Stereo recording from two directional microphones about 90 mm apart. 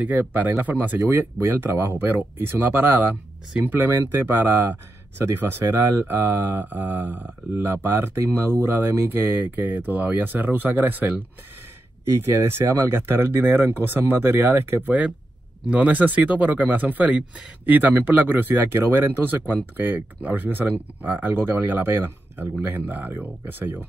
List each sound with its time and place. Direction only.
0.0 s speech: 20° right (ahead or behind)